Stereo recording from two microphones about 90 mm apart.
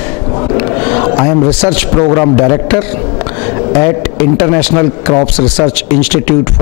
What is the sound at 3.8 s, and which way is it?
Speech, 20° left (ahead or behind).